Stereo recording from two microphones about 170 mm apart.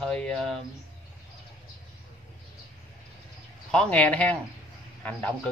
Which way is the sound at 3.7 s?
5° left (ahead or behind).